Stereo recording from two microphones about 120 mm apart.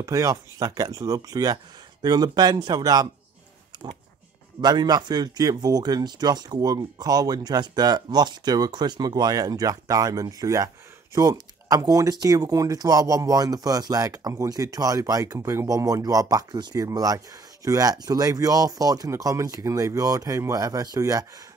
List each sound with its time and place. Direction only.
0.0 s speech: 25° right (ahead or behind)
3.7 s a sound: 40° right (ahead or behind)
4.6 s speech: 35° right (ahead or behind)